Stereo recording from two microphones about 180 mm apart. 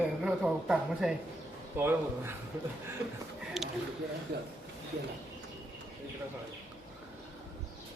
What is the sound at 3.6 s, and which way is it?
Speech, centre (ahead or behind).